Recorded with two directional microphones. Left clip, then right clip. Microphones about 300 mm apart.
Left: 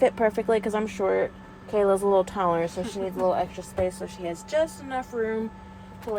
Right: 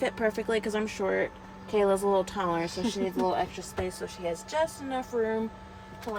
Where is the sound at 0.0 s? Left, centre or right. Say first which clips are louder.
Left 7 dB; centre.